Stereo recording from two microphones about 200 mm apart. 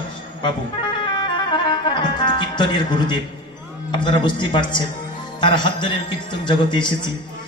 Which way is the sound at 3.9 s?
25° left (ahead or behind).